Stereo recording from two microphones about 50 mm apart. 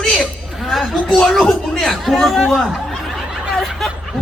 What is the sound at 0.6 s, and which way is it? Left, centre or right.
Speech, centre.